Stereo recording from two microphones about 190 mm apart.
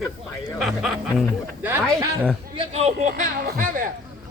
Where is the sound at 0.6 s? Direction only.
Centre (ahead or behind).